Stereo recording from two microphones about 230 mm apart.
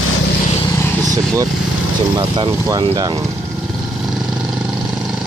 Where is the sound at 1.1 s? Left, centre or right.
Centre.